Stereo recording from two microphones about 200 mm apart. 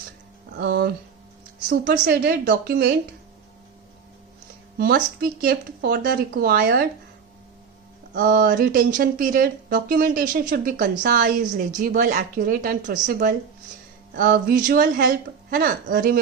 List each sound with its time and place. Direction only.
0.5 s a woman's voice: 55° right (ahead or behind)
1.9 s a woman's voice: 50° right (ahead or behind)
4.8 s a woman's voice: 50° right (ahead or behind)
8.1 s a woman's voice: 45° right (ahead or behind)